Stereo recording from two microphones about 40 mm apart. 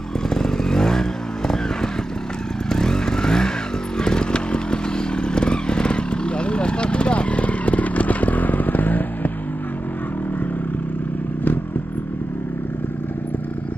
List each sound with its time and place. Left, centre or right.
0.3 s motorcycle: centre
2.7 s vehicle: centre
4.0 s motorcycle: left